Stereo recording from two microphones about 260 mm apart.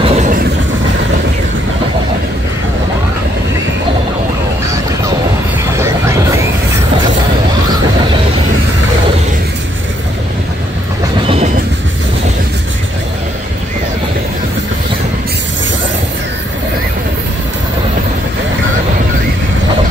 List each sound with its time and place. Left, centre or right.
0.0 s vehicle: right
5.7 s a sound: centre
11.2 s vehicle: right